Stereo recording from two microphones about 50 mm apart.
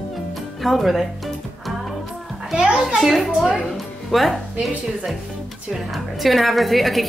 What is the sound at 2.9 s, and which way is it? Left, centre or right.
A woman's voice, centre.